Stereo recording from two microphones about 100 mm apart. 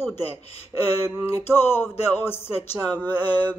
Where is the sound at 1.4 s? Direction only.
25° left (ahead or behind).